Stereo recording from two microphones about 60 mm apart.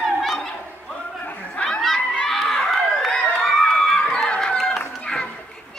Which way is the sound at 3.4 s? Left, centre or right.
Centre.